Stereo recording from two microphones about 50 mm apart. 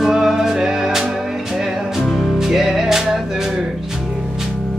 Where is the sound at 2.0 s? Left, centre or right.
Centre.